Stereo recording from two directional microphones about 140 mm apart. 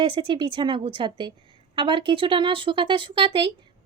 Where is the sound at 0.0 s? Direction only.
40° right (ahead or behind).